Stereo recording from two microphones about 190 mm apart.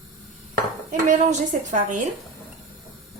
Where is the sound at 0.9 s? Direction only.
40° right (ahead or behind).